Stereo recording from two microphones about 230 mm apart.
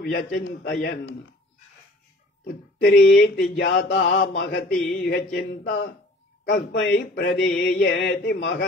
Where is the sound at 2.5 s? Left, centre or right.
Left.